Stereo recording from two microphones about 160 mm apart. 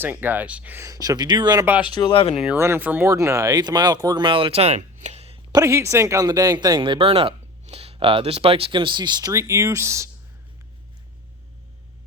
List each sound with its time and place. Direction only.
0.0 s speech: 10° right (ahead or behind)
1.6 s speech: 10° right (ahead or behind)
2.0 s speech: 30° left (ahead or behind)
2.6 s speech: 15° right (ahead or behind); by 5.5 s 40° right (ahead or behind)
5.5 s speech: 20° right (ahead or behind)